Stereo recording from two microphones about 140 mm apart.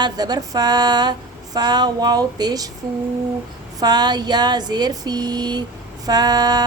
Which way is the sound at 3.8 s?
30° right (ahead or behind).